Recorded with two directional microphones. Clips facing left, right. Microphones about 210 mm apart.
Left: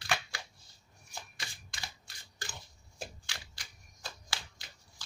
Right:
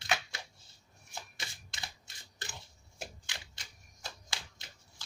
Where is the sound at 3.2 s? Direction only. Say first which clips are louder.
Even; 20° right (ahead or behind).